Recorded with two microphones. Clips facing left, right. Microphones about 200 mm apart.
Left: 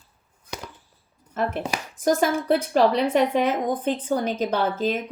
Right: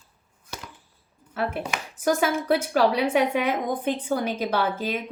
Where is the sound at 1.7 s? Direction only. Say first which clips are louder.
Left 2 dB; 35° left (ahead or behind).